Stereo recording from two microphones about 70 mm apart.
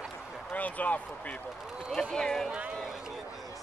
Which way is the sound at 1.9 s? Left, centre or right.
Centre.